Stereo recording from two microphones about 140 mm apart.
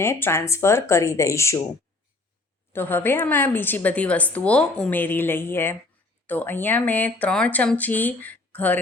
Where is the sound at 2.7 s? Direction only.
15° left (ahead or behind).